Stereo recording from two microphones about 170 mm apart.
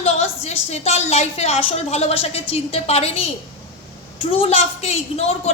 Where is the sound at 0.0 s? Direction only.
40° left (ahead or behind).